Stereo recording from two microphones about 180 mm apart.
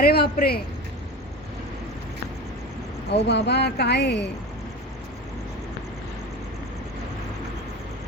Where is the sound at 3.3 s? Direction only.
70° left (ahead or behind).